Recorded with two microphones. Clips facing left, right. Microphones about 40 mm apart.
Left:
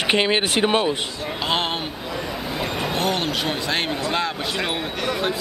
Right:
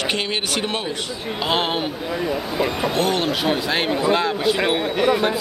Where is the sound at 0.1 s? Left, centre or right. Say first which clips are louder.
Left 4 dB; left.